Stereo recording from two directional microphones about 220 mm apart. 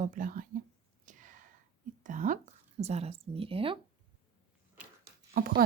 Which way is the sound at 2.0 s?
35° right (ahead or behind).